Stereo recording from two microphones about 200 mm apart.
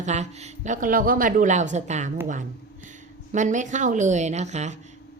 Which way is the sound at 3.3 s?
40° right (ahead or behind).